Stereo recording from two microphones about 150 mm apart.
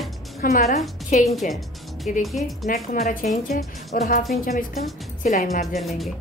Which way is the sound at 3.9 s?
70° left (ahead or behind).